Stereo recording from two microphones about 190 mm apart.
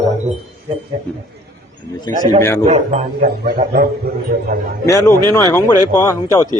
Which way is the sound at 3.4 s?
50° right (ahead or behind).